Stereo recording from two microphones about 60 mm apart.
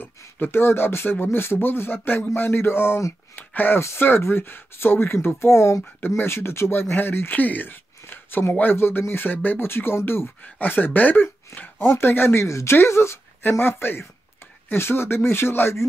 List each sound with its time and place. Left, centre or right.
0.4 s speech: left
3.8 s speech: left
12.4 s speech: left
13.4 s speech: left